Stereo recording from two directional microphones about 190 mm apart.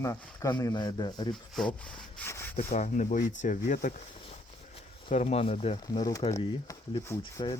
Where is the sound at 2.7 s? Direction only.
40° left (ahead or behind).